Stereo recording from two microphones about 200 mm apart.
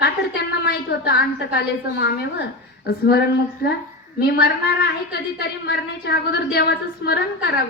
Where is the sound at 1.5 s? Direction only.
55° left (ahead or behind).